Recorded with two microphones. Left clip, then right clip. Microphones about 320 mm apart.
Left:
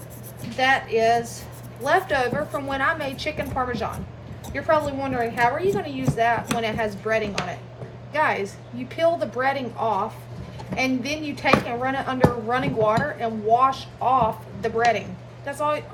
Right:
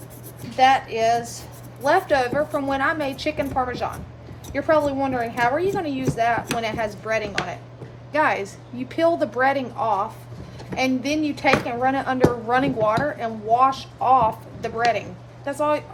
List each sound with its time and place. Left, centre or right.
0.5 s speech: centre
15.4 s speech: centre